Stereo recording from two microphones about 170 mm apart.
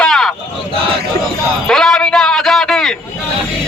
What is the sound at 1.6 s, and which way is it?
Music, 5° left (ahead or behind).